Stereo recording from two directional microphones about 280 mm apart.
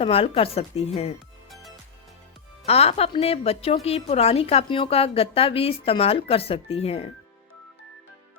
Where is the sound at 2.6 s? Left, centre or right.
Left.